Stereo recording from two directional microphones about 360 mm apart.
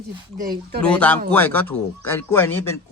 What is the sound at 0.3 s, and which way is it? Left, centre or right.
Speech, right.